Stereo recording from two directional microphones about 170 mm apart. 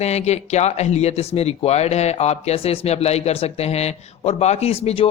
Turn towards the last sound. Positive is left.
turn(degrees=35)  # may be behind; listen again after turning